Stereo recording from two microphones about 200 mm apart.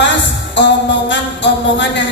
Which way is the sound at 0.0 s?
60° left (ahead or behind).